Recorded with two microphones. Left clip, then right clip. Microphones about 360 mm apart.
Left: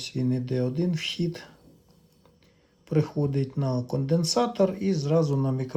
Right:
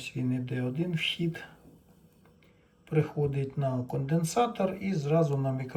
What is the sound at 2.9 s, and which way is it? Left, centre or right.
Speech, left.